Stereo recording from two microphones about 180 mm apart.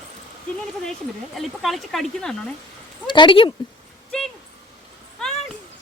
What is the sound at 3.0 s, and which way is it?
Speech, 25° left (ahead or behind).